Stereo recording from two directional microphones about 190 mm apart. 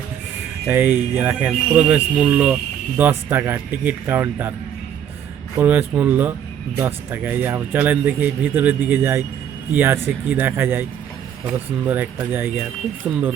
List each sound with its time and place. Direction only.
0.7 s a man's voice: 10° right (ahead or behind)
5.5 s a man's voice: 10° right (ahead or behind)